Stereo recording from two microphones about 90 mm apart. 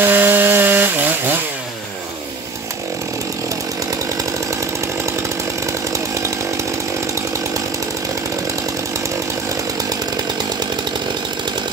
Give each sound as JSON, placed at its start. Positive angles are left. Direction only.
{"t": 0.0, "sound": "wood", "side_deg": -20}